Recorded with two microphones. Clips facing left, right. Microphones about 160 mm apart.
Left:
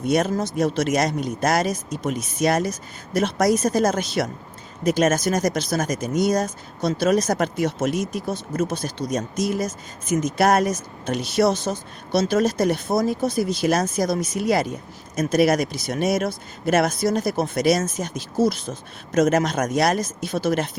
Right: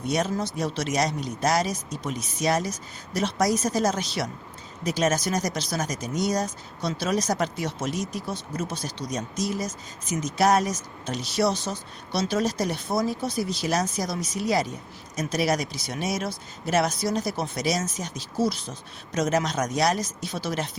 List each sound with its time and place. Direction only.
0.0 s speech: 55° left (ahead or behind)